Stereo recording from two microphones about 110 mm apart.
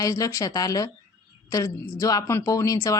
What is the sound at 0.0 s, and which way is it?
Speech, 30° left (ahead or behind).